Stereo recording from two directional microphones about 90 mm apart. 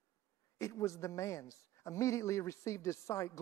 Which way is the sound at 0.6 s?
35° left (ahead or behind).